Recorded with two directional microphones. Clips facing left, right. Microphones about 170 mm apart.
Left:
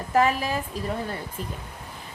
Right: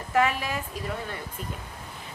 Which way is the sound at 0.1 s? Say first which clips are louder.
Left 3 dB; 35° left (ahead or behind).